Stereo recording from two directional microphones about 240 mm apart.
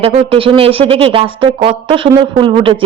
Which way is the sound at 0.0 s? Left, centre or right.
Right.